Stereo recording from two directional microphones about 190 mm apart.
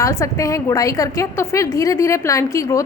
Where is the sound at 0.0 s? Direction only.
15° left (ahead or behind).